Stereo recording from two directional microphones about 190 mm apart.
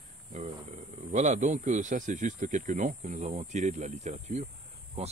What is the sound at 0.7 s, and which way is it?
A man's voice, 40° right (ahead or behind).